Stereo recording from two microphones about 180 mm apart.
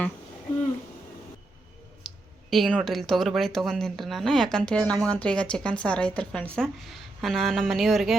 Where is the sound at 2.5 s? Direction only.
Centre (ahead or behind).